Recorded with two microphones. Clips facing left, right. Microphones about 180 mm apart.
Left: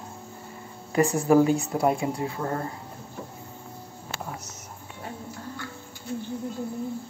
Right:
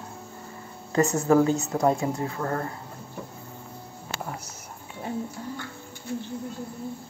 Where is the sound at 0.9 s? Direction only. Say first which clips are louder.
Left 1 dB; 15° left (ahead or behind).